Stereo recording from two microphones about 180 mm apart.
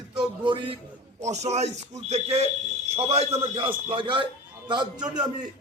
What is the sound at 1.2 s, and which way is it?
A man's voice, 40° right (ahead or behind).